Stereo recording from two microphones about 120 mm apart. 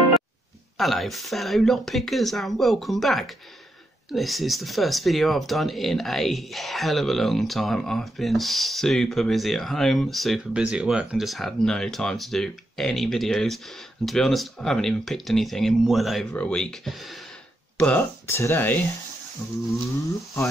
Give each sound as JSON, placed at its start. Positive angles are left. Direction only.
{"t": 0.7, "sound": "speech", "side_deg": 0}
{"t": 17.7, "sound": "speech", "side_deg": 10}
{"t": 18.2, "sound": "speech", "side_deg": 20}